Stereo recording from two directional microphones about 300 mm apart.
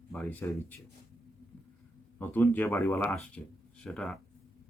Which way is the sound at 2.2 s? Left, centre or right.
Centre.